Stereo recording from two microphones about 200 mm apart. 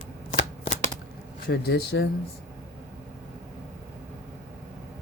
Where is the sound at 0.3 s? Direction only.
35° left (ahead or behind).